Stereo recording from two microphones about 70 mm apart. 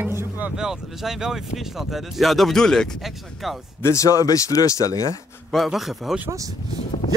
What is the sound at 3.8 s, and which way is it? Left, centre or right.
Speech, left.